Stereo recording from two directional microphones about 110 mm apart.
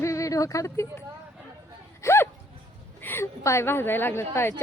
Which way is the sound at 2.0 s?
25° left (ahead or behind).